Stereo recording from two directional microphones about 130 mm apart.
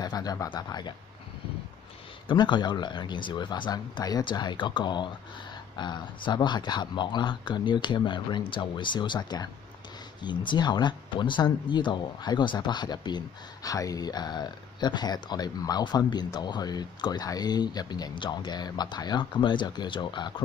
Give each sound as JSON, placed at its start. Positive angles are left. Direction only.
{"t": 0.0, "sound": "speech", "side_deg": 30}
{"t": 2.2, "sound": "speech", "side_deg": 35}
{"t": 10.5, "sound": "speech", "side_deg": 35}